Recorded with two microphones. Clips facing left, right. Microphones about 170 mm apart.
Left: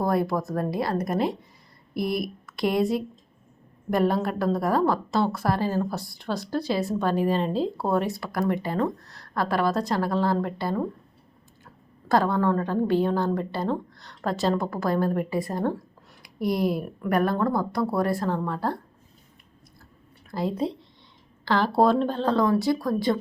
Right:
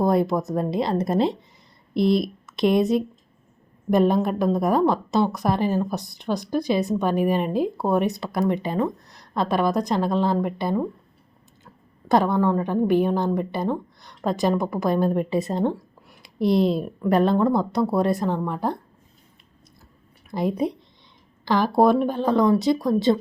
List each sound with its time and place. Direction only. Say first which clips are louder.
0.0 s a woman's voice: right 4 dB; 20° right (ahead or behind)
20.3 s speech: right 3 dB; 20° right (ahead or behind)